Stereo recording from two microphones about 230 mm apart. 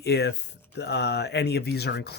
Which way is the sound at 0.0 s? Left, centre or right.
Left.